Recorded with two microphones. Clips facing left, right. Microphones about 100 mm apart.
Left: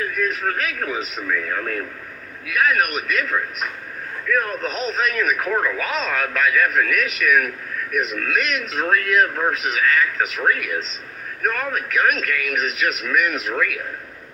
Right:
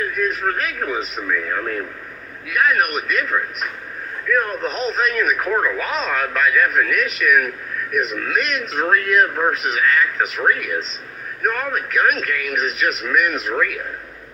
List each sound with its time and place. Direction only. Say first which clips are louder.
0.2 s a man's voice: right 2 dB; 25° right (ahead or behind)
4.4 s a man's voice: right 2 dB; 25° right (ahead or behind)